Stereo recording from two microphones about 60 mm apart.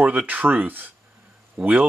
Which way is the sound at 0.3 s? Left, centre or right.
Right.